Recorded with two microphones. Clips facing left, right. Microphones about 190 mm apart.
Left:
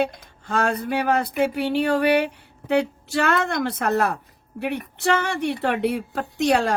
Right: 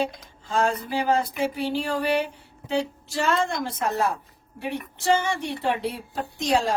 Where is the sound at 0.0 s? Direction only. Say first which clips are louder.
Left 3 dB; 60° left (ahead or behind).